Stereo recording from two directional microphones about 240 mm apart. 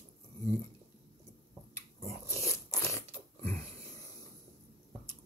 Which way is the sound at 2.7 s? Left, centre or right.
Centre.